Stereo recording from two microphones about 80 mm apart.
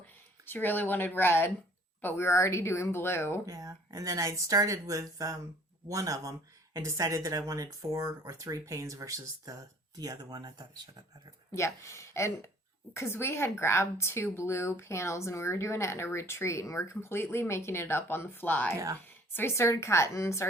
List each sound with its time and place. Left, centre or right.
0.4 s a woman's voice: left
3.4 s speech: right
11.5 s a woman's voice: left